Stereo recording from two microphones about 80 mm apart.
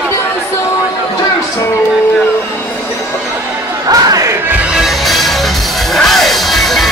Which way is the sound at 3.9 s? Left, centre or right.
Right.